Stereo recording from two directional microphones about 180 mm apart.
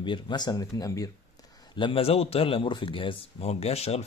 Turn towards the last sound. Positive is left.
turn(degrees=35)  # may be behind; listen again after turning